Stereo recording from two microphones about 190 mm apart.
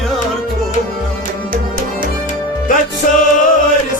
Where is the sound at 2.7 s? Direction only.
45° left (ahead or behind).